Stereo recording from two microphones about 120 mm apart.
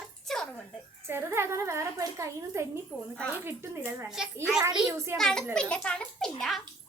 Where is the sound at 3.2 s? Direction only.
15° left (ahead or behind).